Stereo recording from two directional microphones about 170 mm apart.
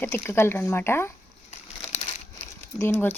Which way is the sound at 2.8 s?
15° left (ahead or behind).